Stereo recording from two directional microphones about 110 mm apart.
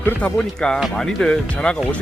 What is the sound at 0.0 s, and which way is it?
Speech, 15° left (ahead or behind).